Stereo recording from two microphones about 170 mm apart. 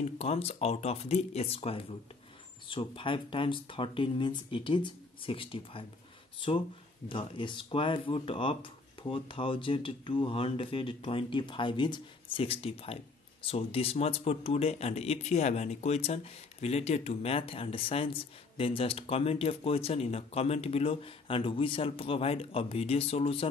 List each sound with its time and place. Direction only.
0.2 s speech: 35° left (ahead or behind)
7.1 s speech: 30° left (ahead or behind)